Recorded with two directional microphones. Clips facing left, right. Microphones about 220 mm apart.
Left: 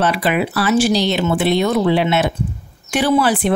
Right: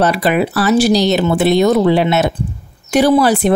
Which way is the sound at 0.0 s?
40° right (ahead or behind).